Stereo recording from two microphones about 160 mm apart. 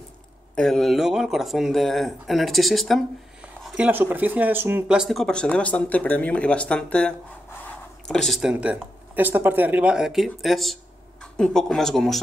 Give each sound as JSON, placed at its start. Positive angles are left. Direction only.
{"t": 0.6, "sound": "speech", "side_deg": 5}